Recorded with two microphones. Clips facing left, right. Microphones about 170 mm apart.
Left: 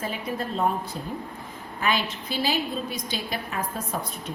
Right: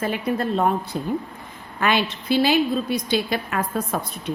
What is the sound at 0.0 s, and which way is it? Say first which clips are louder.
A woman's voice: right 7 dB; 70° right (ahead or behind).